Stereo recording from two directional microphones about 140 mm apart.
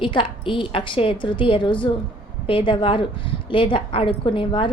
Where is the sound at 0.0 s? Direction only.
35° left (ahead or behind).